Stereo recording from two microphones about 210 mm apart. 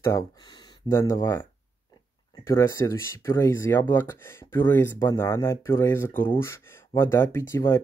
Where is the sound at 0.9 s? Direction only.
15° left (ahead or behind).